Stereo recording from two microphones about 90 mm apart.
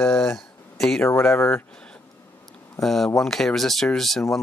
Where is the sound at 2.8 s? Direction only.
5° left (ahead or behind).